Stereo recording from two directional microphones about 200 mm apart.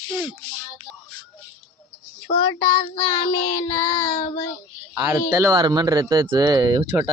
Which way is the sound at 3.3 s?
25° left (ahead or behind).